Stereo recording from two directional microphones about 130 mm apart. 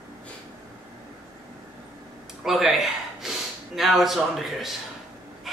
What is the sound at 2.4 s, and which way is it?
A man's voice, centre (ahead or behind).